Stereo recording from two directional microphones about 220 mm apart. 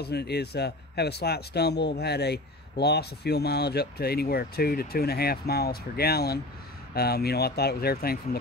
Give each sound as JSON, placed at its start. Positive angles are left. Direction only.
{"t": 0.0, "sound": "speech", "side_deg": 45}